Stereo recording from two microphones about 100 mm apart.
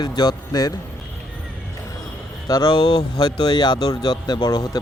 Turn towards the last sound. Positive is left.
turn(degrees=45)  # may be behind; listen again after turning